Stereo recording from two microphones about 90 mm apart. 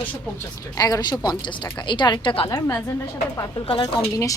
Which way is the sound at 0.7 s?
45° left (ahead or behind).